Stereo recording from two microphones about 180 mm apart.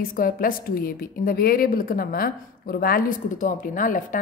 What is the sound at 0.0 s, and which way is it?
A woman's voice, 50° left (ahead or behind).